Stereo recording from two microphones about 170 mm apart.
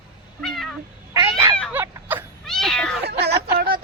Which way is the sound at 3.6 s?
60° right (ahead or behind).